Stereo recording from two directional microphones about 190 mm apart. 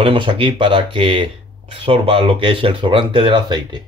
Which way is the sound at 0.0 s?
30° right (ahead or behind).